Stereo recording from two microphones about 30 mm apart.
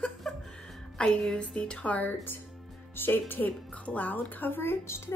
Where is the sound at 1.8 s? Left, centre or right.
Left.